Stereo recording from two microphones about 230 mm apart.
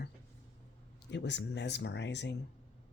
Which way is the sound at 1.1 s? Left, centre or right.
Left.